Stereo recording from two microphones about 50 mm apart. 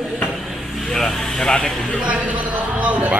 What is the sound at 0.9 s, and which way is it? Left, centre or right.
Speech, centre.